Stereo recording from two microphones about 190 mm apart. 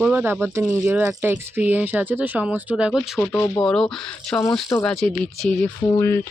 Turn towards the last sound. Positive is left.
turn(degrees=15)  # may be behind; listen again after turning